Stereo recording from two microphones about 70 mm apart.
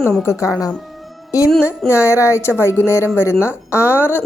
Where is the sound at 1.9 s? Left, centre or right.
Left.